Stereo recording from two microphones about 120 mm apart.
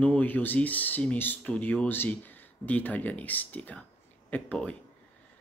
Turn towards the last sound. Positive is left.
turn(degrees=10)  # may be behind; listen again after turning